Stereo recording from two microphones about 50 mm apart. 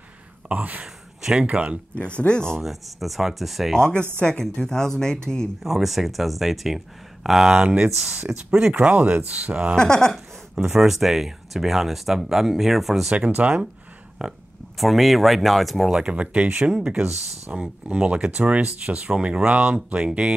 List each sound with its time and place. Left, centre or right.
0.5 s gasp: right
1.4 s speech: right
2.0 s speech: left
2.6 s speech: centre
3.7 s speech: centre
5.6 s speech: centre
8.7 s speech: right
9.8 s speech: centre
10.1 s speech: centre
13.1 s speech: centre
14.2 s speech: centre
15.9 s speech: centre